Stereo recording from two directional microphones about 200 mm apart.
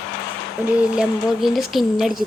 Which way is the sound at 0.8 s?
5° right (ahead or behind).